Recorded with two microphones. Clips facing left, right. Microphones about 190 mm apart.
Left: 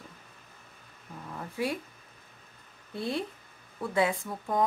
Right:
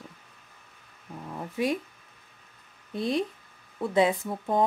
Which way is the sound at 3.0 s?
20° right (ahead or behind).